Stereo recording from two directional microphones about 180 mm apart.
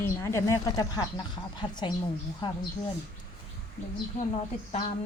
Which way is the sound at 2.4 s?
25° left (ahead or behind).